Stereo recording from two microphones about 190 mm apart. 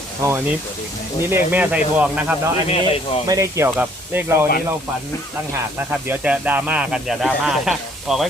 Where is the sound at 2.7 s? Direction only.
30° left (ahead or behind).